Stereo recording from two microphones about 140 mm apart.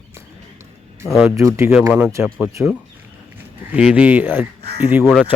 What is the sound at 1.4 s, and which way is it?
Speech, 20° right (ahead or behind).